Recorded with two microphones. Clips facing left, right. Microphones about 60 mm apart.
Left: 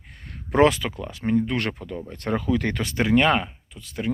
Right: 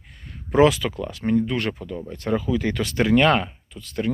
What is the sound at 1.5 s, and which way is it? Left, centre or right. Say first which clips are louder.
Speech: right 1 dB; left.